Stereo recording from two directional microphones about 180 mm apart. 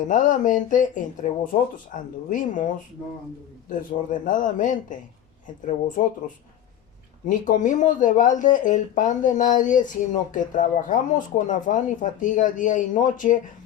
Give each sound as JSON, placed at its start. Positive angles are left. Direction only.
{"t": 0.1, "sound": "speech", "side_deg": 45}
{"t": 7.3, "sound": "speech", "side_deg": 45}